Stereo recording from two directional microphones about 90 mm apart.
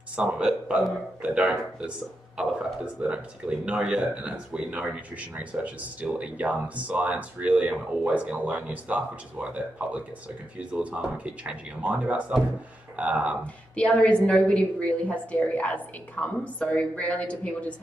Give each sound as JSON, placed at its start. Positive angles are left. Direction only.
{"t": 0.1, "sound": "speech", "side_deg": -15}
{"t": 13.7, "sound": "a woman's voice", "side_deg": 10}